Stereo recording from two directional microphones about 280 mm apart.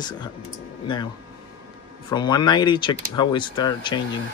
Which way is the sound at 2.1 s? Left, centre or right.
Centre.